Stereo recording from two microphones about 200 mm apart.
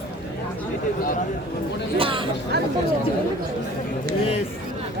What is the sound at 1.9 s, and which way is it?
Chatter, 25° right (ahead or behind).